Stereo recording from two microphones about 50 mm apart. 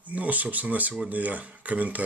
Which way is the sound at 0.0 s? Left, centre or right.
Right.